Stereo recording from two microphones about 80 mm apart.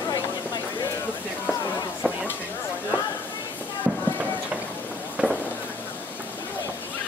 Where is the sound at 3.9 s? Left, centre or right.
Centre.